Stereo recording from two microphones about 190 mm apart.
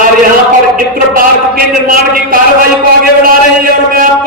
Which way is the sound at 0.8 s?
45° right (ahead or behind).